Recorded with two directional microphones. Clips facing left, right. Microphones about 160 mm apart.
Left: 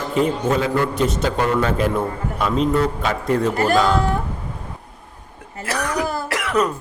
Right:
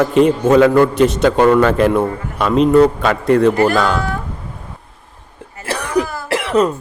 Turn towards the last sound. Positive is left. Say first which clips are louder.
# right 5 dB
turn(degrees=-30)  # may be behind; listen again after turning